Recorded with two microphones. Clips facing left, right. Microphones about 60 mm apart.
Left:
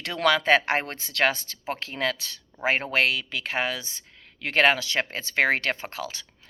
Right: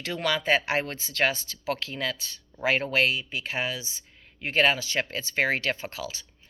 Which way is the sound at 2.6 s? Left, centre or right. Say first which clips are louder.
Left 1 dB; left.